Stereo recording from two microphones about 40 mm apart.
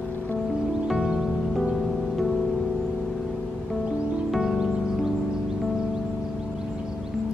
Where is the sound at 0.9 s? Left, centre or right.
Centre.